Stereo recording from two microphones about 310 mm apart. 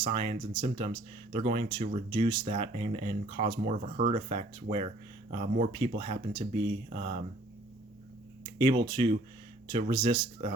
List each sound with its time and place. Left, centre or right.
0.0 s speech: centre
8.5 s speech: centre